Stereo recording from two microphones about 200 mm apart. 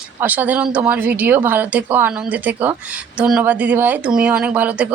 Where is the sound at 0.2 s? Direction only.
10° right (ahead or behind).